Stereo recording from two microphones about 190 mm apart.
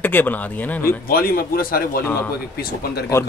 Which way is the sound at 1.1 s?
50° left (ahead or behind).